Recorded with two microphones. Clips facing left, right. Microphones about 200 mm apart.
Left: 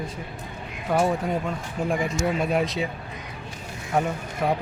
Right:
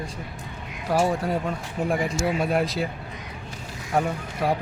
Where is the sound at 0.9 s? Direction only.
5° right (ahead or behind).